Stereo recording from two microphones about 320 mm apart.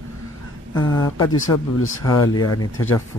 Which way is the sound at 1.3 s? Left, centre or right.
Left.